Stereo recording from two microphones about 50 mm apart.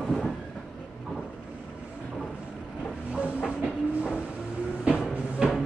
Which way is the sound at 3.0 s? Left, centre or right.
Right.